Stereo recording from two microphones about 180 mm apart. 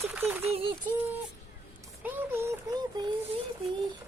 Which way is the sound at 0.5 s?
30° right (ahead or behind).